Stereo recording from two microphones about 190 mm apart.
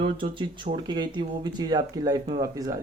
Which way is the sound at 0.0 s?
25° right (ahead or behind).